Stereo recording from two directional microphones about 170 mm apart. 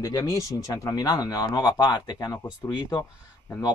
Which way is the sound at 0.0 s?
20° left (ahead or behind).